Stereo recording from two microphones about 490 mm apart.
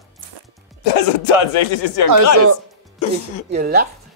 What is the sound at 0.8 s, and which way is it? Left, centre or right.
Speech, left.